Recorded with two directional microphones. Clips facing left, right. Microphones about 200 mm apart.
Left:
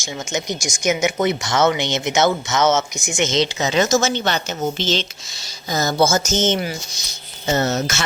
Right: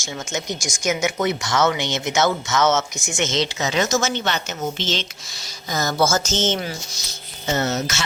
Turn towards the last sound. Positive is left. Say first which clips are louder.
# left 2 dB
turn(degrees=55)  # may be behind; listen again after turning